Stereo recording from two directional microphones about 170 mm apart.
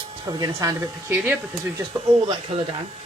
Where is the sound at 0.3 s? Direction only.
20° right (ahead or behind).